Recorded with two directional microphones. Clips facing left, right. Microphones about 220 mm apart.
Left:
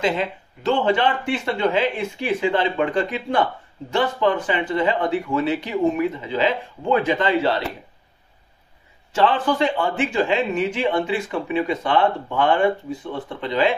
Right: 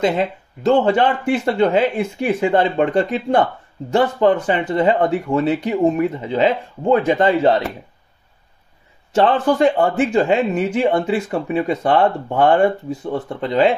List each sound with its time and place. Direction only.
0.0 s speech: 40° right (ahead or behind)
9.1 s speech: 40° right (ahead or behind)